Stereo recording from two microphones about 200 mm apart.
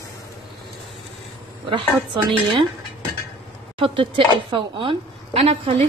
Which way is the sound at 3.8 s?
25° right (ahead or behind).